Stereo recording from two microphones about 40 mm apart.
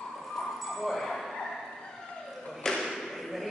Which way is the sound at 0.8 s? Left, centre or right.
Centre.